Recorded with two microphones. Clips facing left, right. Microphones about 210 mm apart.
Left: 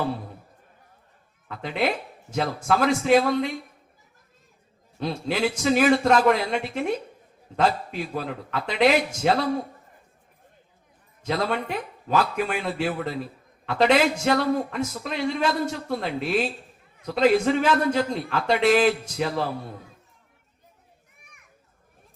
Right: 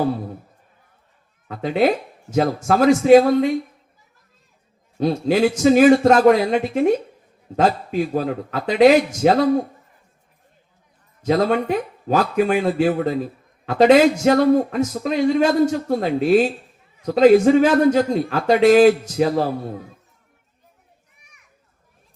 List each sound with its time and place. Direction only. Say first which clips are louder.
1.5 s a man's voice: right 8 dB; 40° right (ahead or behind)
4.9 s a man's voice: right 9 dB; 40° right (ahead or behind)
11.3 s a man's voice: right 8 dB; 40° right (ahead or behind)